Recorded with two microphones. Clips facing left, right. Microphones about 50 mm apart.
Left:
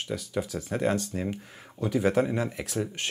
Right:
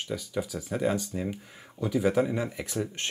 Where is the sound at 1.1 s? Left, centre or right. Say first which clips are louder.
Left 1 dB; centre.